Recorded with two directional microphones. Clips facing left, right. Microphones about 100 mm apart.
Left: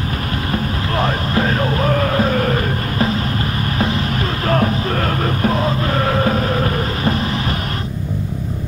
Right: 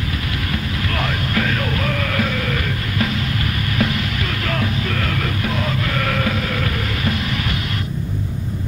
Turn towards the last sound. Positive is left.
turn(degrees=35)  # may be behind; listen again after turning